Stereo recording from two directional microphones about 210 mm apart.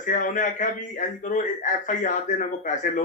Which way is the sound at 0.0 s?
40° left (ahead or behind).